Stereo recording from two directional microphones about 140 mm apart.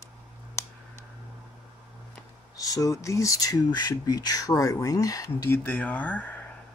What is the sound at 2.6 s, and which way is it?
Speech, 25° left (ahead or behind).